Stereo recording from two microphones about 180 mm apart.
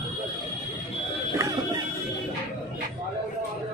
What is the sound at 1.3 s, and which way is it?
Music, 15° right (ahead or behind).